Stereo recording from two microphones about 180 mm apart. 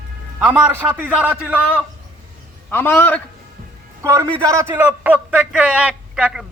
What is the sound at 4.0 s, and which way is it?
A man's voice, 20° right (ahead or behind).